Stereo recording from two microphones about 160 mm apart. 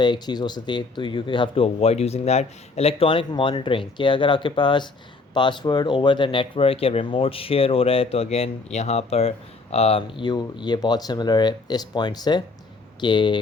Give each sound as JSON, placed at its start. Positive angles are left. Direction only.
{"t": 0.0, "sound": "speech", "side_deg": 25}